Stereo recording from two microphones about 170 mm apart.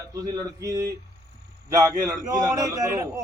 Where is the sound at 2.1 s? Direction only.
20° right (ahead or behind).